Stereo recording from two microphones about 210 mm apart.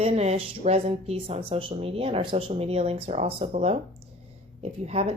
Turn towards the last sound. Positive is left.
turn(degrees=-30)  # may be behind; listen again after turning